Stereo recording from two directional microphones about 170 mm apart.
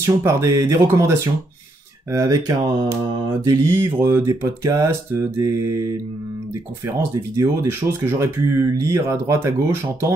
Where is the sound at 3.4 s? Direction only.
15° right (ahead or behind).